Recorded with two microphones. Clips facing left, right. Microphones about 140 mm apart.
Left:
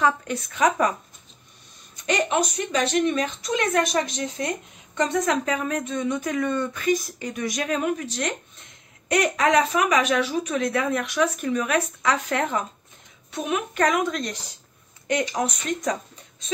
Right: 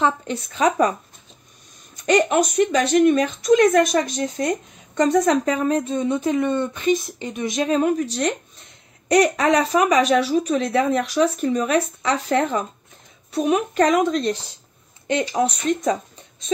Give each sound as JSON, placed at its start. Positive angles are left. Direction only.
{"t": 0.0, "sound": "speech", "side_deg": -30}
{"t": 2.0, "sound": "speech", "side_deg": -45}